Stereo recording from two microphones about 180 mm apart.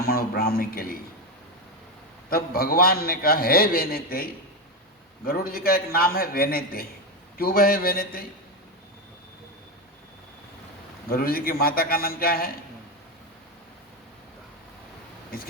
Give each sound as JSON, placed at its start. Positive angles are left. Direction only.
{"t": 0.0, "sound": "a sound", "side_deg": 55}
{"t": 2.3, "sound": "a man's voice", "side_deg": 55}
{"t": 11.1, "sound": "a man's voice", "side_deg": 55}